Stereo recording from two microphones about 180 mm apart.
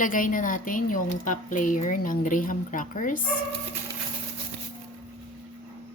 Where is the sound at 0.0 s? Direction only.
50° left (ahead or behind).